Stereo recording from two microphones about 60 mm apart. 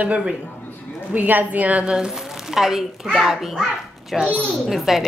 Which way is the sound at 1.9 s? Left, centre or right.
Centre.